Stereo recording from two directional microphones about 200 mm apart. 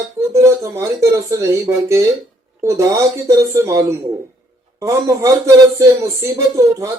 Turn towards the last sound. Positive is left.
turn(degrees=-15)  # may be behind; listen again after turning